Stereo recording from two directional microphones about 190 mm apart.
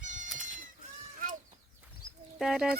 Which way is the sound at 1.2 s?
45° right (ahead or behind).